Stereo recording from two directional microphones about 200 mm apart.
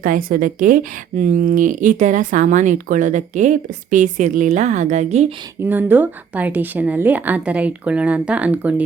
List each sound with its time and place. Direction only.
0.0 s a woman's voice: 45° right (ahead or behind)
5.5 s a woman's voice: 10° right (ahead or behind)